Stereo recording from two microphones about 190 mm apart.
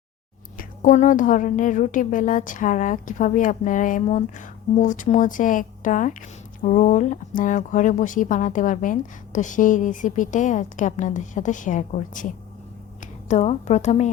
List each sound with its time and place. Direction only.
0.5 s a woman's voice: 45° left (ahead or behind)